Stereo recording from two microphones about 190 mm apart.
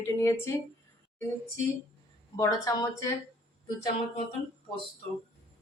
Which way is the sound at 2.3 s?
15° left (ahead or behind).